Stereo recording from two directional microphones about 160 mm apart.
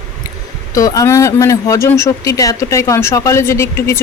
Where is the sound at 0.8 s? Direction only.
20° left (ahead or behind).